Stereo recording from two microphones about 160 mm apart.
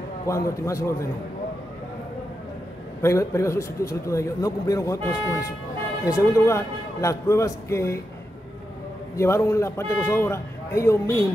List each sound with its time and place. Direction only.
0.3 s a man's voice: 20° left (ahead or behind)
3.0 s a man's voice: 20° left (ahead or behind)
9.1 s a man's voice: 15° left (ahead or behind)